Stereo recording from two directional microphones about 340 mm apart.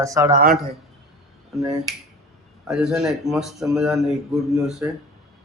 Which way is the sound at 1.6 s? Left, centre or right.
Centre.